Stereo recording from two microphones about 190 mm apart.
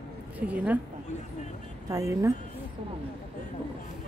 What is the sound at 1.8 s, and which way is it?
Speech, 15° right (ahead or behind).